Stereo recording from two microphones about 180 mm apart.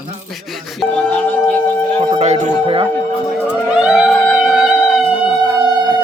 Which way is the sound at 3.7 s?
5° right (ahead or behind).